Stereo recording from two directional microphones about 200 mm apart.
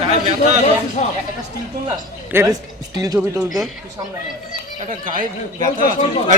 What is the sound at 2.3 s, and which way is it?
Speech, 10° right (ahead or behind).